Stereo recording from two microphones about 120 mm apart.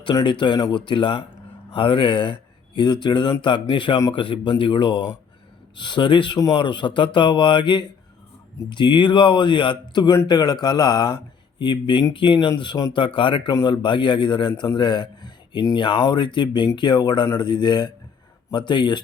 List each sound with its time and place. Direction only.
0.0 s speech: 40° left (ahead or behind)